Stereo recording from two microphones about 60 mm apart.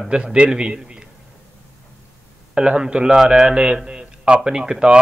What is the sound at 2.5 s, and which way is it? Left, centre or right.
A man's voice, centre.